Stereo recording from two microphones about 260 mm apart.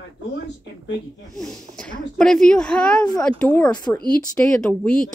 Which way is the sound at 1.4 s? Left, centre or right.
Centre.